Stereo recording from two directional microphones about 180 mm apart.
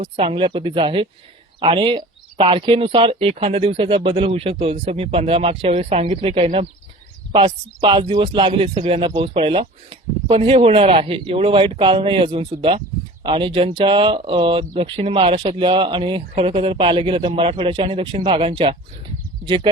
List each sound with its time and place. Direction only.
0.0 s a man's voice: 30° right (ahead or behind)